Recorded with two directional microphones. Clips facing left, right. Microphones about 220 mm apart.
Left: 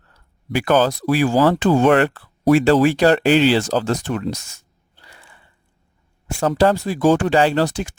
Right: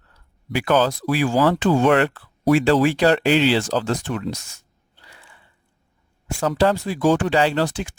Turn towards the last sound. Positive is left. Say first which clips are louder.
# left 3 dB
turn(degrees=40)  # may be behind; listen again after turning